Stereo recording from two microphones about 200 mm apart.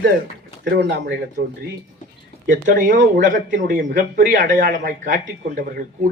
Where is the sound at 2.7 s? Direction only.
40° right (ahead or behind).